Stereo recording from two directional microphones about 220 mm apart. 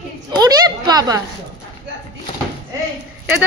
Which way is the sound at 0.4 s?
15° right (ahead or behind).